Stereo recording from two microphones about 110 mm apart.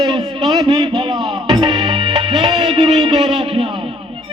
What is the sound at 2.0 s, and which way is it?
Music, 50° right (ahead or behind).